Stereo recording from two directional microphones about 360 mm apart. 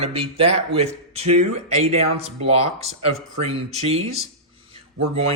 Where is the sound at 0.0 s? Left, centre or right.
Centre.